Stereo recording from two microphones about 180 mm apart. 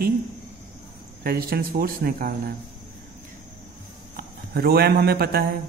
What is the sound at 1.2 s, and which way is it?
A man's voice, 55° right (ahead or behind).